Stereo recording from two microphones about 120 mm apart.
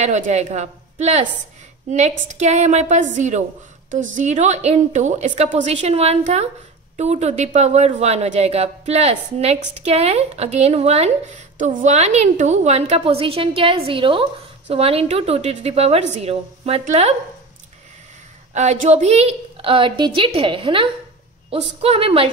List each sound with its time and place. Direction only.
0.0 s a woman's voice: 70° right (ahead or behind)
18.5 s a woman's voice: 75° right (ahead or behind); by 22.3 s 50° right (ahead or behind)